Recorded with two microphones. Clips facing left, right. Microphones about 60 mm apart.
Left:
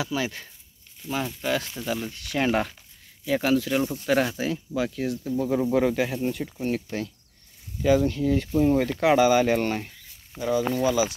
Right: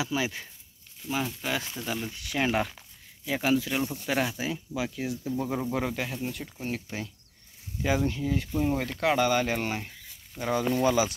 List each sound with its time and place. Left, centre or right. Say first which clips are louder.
0.0 s speech: left 1 dB; centre
7.8 s speech: left 6 dB; centre
8.2 s speech: left 6 dB; centre
10.4 s speech: left 2 dB; right